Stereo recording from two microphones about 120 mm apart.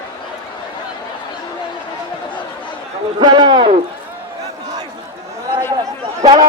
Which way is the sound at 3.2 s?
40° right (ahead or behind).